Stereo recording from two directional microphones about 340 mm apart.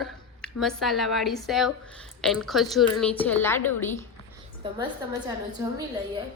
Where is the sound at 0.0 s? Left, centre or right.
Centre.